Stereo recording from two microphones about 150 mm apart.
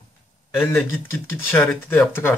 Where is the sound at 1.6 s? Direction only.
5° left (ahead or behind).